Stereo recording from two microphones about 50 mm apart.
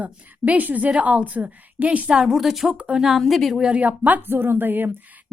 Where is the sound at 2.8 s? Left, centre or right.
Centre.